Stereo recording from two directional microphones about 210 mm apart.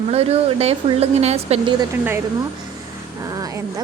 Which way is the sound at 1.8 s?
10° right (ahead or behind).